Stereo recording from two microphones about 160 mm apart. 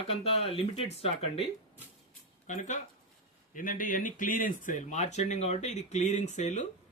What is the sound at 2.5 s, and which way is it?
Speech, 50° left (ahead or behind).